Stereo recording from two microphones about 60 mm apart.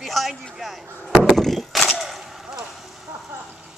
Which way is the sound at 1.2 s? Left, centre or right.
Centre.